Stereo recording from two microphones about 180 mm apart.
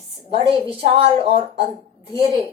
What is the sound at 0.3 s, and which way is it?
A woman's voice, 30° right (ahead or behind).